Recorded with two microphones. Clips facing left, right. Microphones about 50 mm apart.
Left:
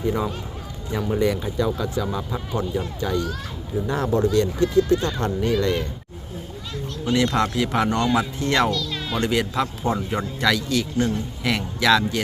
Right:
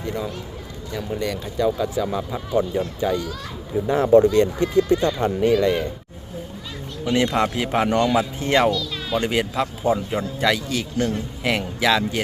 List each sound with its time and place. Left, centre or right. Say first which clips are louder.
0.0 s speech: left 3 dB; centre
1.5 s a man's voice: right 2 dB; centre
4.1 s a man's voice: right 6 dB; right
7.0 s a man's voice: right 1 dB; right
8.7 s a man's voice: right 2 dB; centre